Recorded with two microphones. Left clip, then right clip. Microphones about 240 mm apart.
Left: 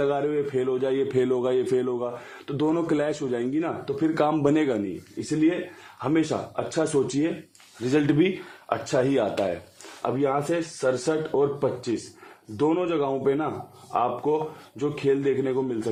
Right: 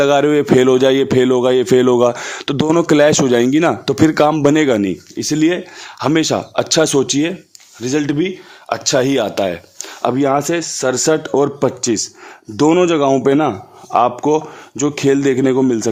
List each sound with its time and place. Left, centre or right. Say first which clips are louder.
0.0 s speech: right 12 dB; right
2.7 s speech: right 14 dB; right
4.1 s speech: right 7 dB; right
5.3 s speech: right 8 dB; right
7.8 s speech: right 5 dB; right
8.7 s speech: right 8 dB; right
10.0 s speech: right 10 dB; right